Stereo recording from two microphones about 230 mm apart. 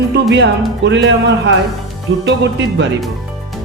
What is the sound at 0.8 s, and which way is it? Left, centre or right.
Speech, right.